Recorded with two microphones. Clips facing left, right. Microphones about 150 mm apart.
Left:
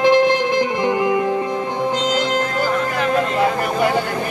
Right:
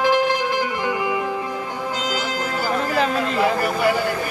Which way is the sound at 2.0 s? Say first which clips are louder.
Left 6 dB; 10° right (ahead or behind).